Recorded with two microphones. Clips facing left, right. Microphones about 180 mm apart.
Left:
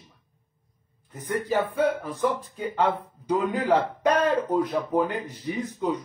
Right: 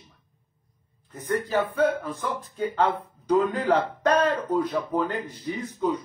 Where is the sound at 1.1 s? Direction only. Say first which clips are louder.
Even; 15° left (ahead or behind).